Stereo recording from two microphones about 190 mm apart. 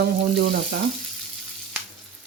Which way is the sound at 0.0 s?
60° right (ahead or behind).